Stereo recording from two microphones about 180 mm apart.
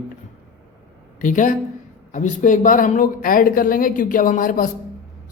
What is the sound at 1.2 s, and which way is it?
Speech, 45° left (ahead or behind).